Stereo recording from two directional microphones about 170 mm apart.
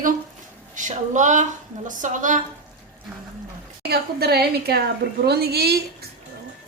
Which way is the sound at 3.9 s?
65° right (ahead or behind).